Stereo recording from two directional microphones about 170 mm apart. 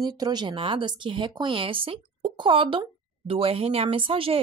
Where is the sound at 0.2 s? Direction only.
25° right (ahead or behind).